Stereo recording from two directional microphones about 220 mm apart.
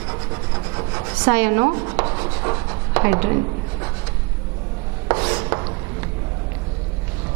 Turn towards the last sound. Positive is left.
turn(degrees=-25)  # may be behind; listen again after turning